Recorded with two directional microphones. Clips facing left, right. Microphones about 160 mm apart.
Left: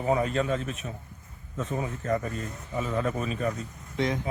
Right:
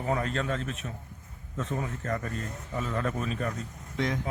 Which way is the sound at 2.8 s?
5° left (ahead or behind).